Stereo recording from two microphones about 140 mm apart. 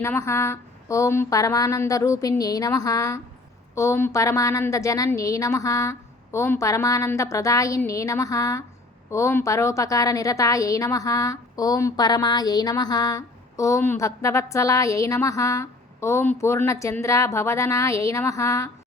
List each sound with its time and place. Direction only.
0.0 s a woman's voice: 20° left (ahead or behind)